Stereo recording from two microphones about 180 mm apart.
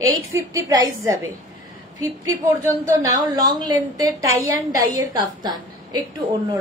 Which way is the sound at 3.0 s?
20° right (ahead or behind).